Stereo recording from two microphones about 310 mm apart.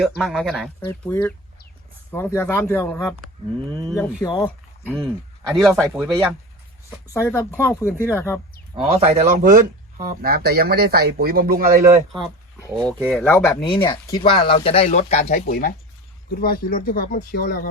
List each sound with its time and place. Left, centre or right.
0.2 s speech: centre
7.1 s speech: centre
8.7 s speech: centre
12.8 s speech: centre; by 17.7 s left